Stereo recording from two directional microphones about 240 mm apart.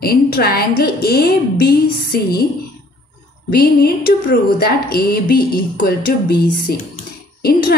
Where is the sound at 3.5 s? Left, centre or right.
Left.